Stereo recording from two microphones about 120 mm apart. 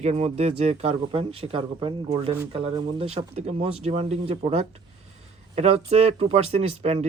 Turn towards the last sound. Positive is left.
turn(degrees=-65)  # may be behind; listen again after turning